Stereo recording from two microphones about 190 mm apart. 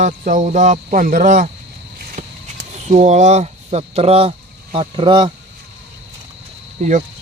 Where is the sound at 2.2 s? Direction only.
35° right (ahead or behind).